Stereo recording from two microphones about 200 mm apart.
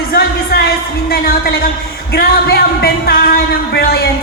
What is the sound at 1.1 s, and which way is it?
Speech, 50° left (ahead or behind).